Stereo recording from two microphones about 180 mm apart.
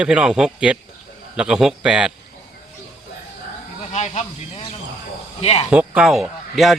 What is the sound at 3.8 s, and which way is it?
Snake, 40° left (ahead or behind).